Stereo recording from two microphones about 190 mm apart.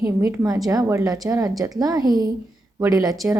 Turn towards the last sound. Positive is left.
turn(degrees=-20)  # may be behind; listen again after turning